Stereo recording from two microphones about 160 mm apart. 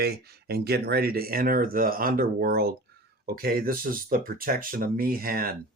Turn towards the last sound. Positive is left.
turn(degrees=-70)  # may be behind; listen again after turning